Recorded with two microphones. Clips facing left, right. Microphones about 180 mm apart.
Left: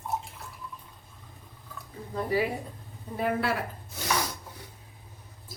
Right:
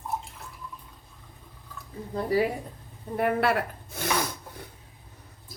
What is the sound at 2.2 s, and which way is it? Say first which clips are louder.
Speech: right 3 dB; 35° right (ahead or behind).